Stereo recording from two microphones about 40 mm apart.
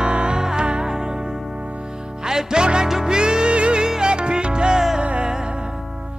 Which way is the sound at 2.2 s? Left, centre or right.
Centre.